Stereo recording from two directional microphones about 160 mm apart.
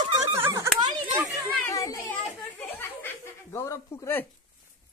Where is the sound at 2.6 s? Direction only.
10° left (ahead or behind).